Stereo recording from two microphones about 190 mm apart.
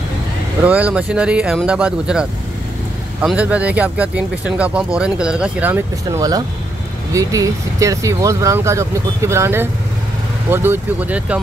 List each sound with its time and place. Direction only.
0.7 s speech: 5° right (ahead or behind)